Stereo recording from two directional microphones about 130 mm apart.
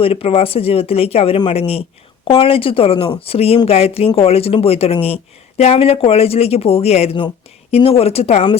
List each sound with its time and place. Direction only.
0.0 s speech: 50° left (ahead or behind)